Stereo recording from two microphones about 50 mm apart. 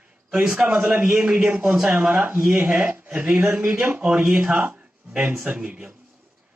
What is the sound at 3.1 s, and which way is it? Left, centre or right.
Speech, right.